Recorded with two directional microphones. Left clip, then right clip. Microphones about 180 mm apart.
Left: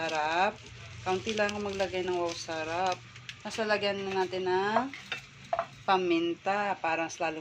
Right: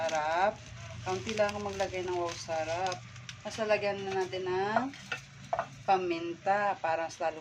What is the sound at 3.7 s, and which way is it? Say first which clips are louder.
Speech: even; 15° left (ahead or behind).